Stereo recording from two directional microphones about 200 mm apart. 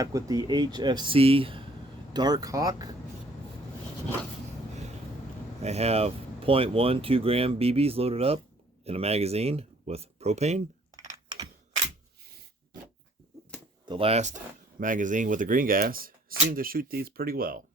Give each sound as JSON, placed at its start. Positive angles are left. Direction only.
{"t": 0.0, "sound": "speech", "side_deg": -15}
{"t": 5.6, "sound": "speech", "side_deg": -30}
{"t": 10.9, "sound": "computer keyboard", "side_deg": -20}
{"t": 13.8, "sound": "speech", "side_deg": -25}